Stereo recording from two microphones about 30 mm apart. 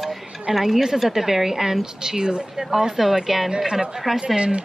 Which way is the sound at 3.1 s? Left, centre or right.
Centre.